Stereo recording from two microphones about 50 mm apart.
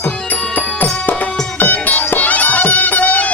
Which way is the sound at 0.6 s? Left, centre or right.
Left.